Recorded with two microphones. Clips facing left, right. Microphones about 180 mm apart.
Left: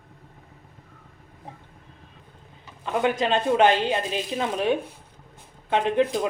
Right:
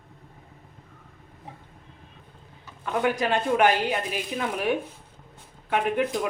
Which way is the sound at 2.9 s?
20° left (ahead or behind).